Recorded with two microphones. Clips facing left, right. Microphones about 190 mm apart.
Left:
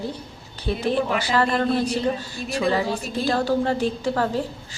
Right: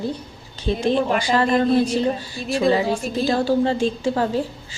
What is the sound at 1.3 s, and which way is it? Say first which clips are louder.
A woman's voice: right 4 dB; 10° right (ahead or behind).